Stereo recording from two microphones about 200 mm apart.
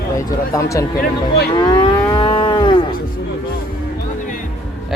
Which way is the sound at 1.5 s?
20° left (ahead or behind).